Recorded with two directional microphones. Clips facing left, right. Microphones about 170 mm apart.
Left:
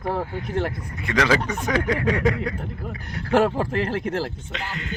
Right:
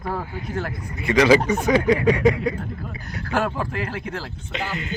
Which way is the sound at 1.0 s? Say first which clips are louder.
Right 5 dB; 5° right (ahead or behind).